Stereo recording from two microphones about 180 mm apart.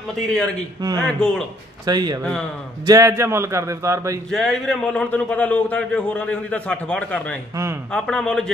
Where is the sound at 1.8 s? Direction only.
20° right (ahead or behind).